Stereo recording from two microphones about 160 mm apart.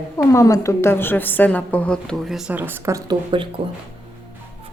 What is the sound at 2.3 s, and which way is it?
Speech, 10° right (ahead or behind).